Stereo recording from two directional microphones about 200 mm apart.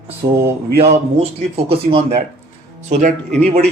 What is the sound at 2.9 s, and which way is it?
Mantra, 40° right (ahead or behind).